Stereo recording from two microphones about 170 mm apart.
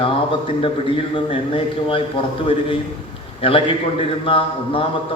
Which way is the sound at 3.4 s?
30° left (ahead or behind).